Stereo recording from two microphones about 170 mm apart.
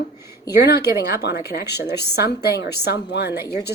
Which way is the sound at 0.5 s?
75° left (ahead or behind).